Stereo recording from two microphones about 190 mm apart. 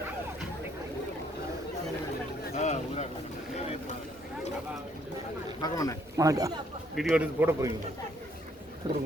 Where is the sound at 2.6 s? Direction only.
35° left (ahead or behind).